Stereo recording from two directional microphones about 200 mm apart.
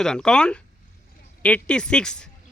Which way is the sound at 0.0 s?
5° left (ahead or behind).